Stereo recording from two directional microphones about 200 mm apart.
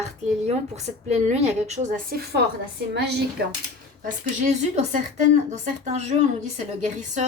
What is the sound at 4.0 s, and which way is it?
A woman's voice, 35° right (ahead or behind).